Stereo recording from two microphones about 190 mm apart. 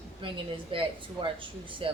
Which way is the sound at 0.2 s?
25° right (ahead or behind).